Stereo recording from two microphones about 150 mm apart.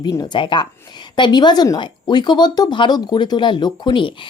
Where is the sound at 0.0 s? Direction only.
25° left (ahead or behind).